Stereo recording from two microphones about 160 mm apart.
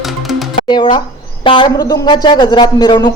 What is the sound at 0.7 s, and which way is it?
Speech, 30° left (ahead or behind).